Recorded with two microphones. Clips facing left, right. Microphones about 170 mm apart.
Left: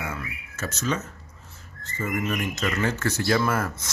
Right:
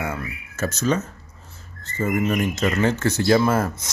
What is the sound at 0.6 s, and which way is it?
Speech, 40° right (ahead or behind).